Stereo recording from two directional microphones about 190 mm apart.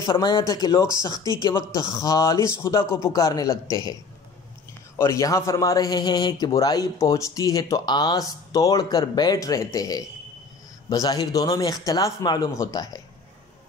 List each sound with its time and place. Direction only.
0.0 s a man's voice: 25° left (ahead or behind)
4.9 s a man's voice: 15° left (ahead or behind)